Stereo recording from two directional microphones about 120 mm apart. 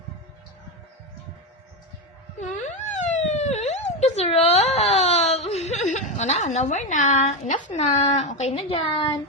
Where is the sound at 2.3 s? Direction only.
80° left.